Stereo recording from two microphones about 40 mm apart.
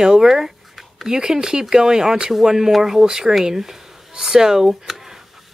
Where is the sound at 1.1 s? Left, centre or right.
Centre.